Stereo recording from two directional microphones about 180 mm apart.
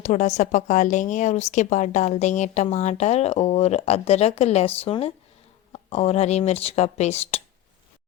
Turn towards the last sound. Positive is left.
turn(degrees=35)  # may be behind; listen again after turning